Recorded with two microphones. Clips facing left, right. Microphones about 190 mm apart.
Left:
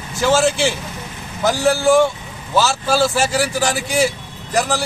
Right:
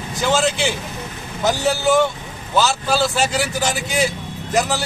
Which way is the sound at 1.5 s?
20° right (ahead or behind).